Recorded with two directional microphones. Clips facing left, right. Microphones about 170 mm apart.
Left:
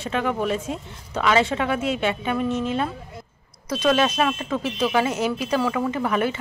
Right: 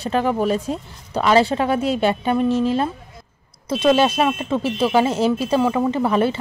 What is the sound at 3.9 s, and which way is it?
Speech, 30° right (ahead or behind).